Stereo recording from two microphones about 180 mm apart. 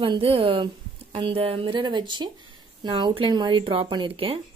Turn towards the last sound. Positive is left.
turn(degrees=-30)  # may be behind; listen again after turning